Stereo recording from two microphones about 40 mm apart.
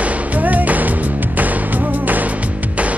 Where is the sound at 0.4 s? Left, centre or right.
Right.